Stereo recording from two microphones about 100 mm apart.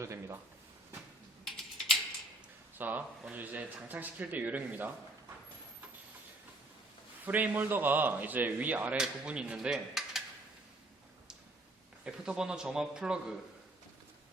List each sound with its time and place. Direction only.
0.0 s speech: 30° right (ahead or behind)
2.7 s speech: 20° right (ahead or behind)
7.3 s speech: 15° right (ahead or behind)
9.0 s cutlery: 10° right (ahead or behind)
12.0 s speech: 10° right (ahead or behind)